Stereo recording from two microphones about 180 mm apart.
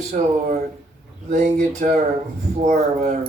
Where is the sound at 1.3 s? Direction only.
40° right (ahead or behind).